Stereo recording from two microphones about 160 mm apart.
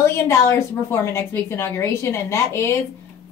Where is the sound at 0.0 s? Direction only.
15° left (ahead or behind).